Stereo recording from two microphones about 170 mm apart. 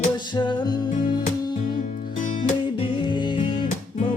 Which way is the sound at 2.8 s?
30° left (ahead or behind).